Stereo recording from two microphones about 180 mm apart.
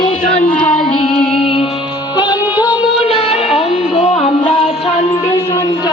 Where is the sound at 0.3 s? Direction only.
5° left (ahead or behind).